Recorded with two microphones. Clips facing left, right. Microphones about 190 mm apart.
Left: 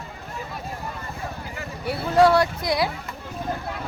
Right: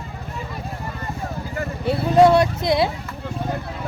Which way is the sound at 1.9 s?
25° right (ahead or behind).